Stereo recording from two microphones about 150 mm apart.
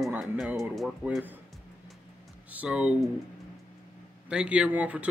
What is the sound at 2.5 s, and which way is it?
Speech, 10° right (ahead or behind).